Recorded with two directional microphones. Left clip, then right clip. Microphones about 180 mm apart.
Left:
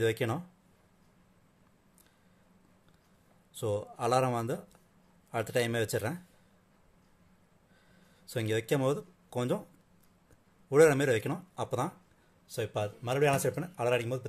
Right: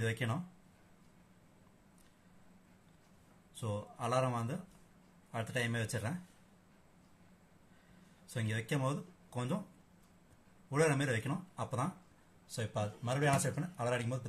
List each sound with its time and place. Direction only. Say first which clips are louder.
0.0 s a man's voice: left 8 dB; 50° left (ahead or behind)
3.5 s a man's voice: left 9 dB; 50° left (ahead or behind)
8.3 s speech: left 9 dB; 50° left (ahead or behind)
10.7 s a man's voice: left 10 dB; 50° left (ahead or behind)